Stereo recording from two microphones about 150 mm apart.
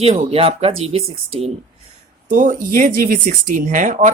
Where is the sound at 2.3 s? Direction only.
60° right (ahead or behind).